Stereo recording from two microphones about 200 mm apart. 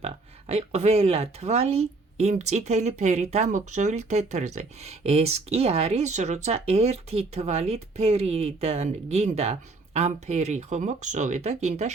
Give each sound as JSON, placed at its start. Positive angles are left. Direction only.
{"t": 0.0, "sound": "speech", "side_deg": -30}